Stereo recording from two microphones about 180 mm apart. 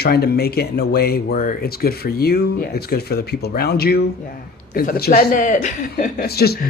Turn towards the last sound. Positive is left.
turn(degrees=60)  # may be behind; listen again after turning